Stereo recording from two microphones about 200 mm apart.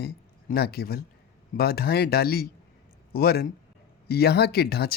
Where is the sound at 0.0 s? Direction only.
50° left (ahead or behind).